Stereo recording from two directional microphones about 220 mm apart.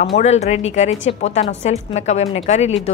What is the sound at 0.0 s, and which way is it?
A woman's voice, 30° left (ahead or behind).